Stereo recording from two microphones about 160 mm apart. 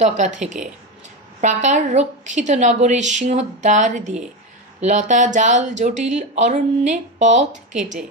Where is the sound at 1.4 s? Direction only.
50° right (ahead or behind).